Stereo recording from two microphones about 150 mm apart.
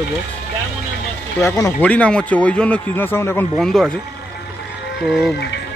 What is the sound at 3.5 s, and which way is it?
Speech, centre (ahead or behind).